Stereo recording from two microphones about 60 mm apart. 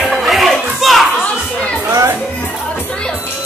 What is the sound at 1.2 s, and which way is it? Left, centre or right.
Children playing, centre.